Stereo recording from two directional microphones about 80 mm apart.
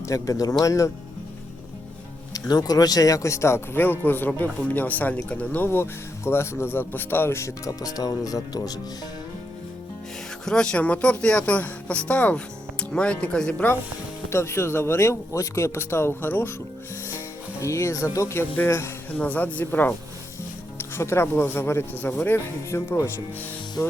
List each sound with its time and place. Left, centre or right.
0.0 s speech: left
2.3 s speech: left
10.4 s speech: centre
14.3 s speech: left
19.2 s speech: centre